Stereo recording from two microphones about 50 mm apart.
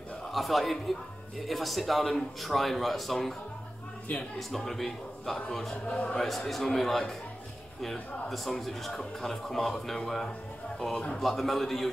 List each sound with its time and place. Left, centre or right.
0.3 s a man's voice: centre
4.4 s a man's voice: centre
5.9 s a man's voice: left
6.1 s a man's voice: centre